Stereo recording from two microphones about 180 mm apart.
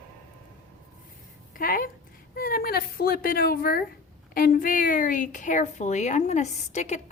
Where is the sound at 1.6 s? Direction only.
50° left (ahead or behind).